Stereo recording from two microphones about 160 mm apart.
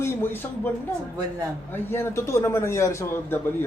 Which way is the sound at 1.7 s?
15° left (ahead or behind).